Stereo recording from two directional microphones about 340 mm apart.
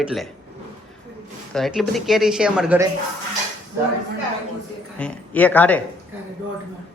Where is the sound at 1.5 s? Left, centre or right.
Centre.